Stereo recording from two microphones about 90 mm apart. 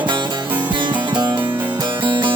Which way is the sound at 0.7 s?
65° right (ahead or behind).